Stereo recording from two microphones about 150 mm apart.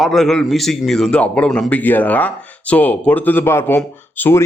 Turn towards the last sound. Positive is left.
turn(degrees=15)  # may be behind; listen again after turning